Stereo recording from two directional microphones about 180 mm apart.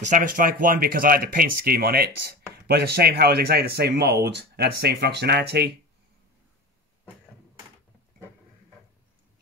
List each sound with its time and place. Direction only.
0.0 s speech: 45° right (ahead or behind); by 5.7 s 65° right (ahead or behind)